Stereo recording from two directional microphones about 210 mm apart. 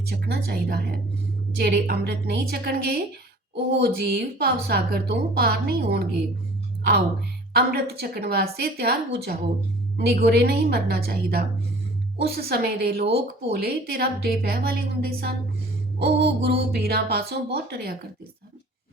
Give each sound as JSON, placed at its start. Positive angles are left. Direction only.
{"t": 0.3, "sound": "a woman's voice", "side_deg": -50}
{"t": 7.5, "sound": "a woman's voice", "side_deg": -50}